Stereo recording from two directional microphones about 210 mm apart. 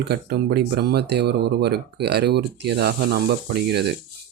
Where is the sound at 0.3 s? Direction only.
50° right (ahead or behind).